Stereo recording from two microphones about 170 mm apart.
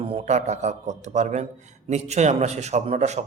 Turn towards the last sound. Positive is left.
turn(degrees=-40)  # may be behind; listen again after turning